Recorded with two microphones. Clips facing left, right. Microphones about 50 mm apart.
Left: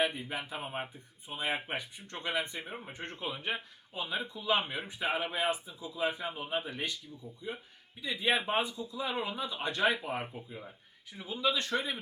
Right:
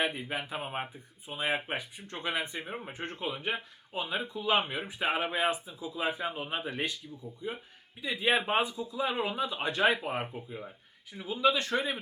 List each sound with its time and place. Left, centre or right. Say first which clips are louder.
0.0 s speech: even; centre
0.6 s speech: right 2 dB; right
1.3 s speech: right 3 dB; centre
2.9 s speech: right 2 dB; centre
5.1 s speech: right 3 dB; right
5.5 s speech: right 2 dB; centre
10.0 s speech: right 3 dB; centre
11.1 s speech: right 5 dB; centre